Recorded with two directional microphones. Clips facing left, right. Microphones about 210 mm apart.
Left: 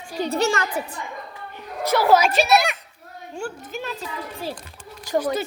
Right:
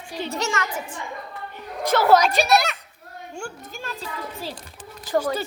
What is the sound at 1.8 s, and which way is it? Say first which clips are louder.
Speech: even; 10° left (ahead or behind).